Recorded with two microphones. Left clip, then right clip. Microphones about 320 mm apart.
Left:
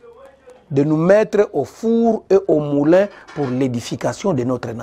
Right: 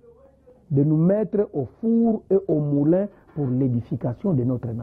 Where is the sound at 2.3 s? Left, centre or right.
Centre.